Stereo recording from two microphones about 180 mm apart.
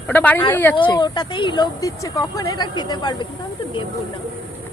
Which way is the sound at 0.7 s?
25° left (ahead or behind).